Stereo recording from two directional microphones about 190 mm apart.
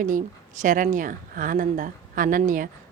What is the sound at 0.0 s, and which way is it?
Speech, 45° right (ahead or behind).